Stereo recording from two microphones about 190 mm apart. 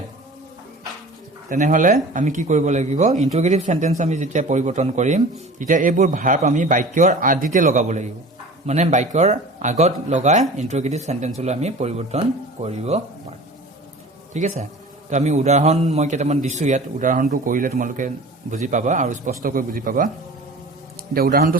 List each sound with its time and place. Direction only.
1.5 s a man's voice: 40° right (ahead or behind)
14.3 s a man's voice: 40° right (ahead or behind)
21.1 s a man's voice: 50° right (ahead or behind)